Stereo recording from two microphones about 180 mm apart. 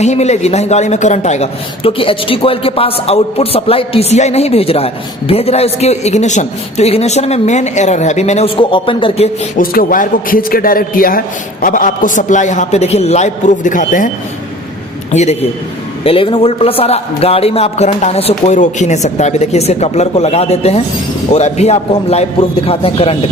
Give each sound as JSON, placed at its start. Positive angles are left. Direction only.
{"t": 0.0, "sound": "a man's voice", "side_deg": 40}
{"t": 9.6, "sound": "a man's voice", "side_deg": 50}
{"t": 15.1, "sound": "a man's voice", "side_deg": 40}